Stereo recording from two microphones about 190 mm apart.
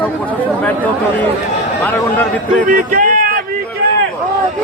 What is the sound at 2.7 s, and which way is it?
Music, 45° right (ahead or behind).